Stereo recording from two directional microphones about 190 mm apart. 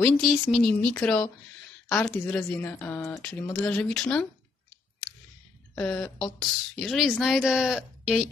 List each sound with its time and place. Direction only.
0.0 s speech: centre (ahead or behind)
5.8 s speech: 5° left (ahead or behind)